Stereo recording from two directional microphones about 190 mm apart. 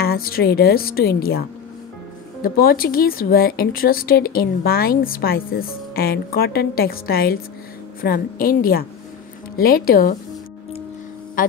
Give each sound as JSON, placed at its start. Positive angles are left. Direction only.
{"t": 0.0, "sound": "speech", "side_deg": 55}
{"t": 2.4, "sound": "speech", "side_deg": 50}